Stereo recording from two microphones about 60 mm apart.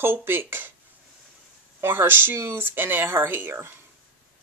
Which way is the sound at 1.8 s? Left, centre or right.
Right.